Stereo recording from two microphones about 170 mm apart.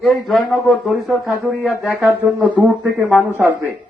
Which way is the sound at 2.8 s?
10° right (ahead or behind).